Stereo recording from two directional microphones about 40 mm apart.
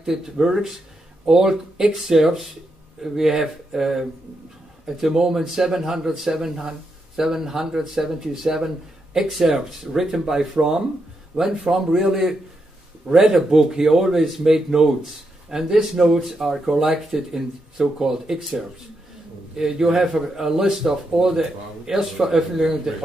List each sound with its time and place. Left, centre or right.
0.0 s speech: centre